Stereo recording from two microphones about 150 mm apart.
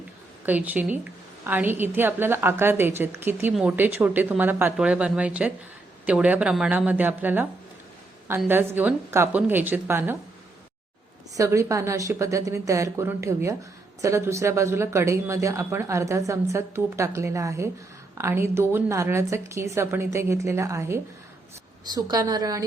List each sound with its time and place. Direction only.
0.4 s a woman's voice: 10° right (ahead or behind)
8.4 s a woman's voice: 15° right (ahead or behind)
11.3 s a woman's voice: 20° right (ahead or behind)